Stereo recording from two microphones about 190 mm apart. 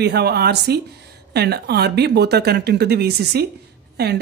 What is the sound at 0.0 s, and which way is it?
Speech, 55° right (ahead or behind).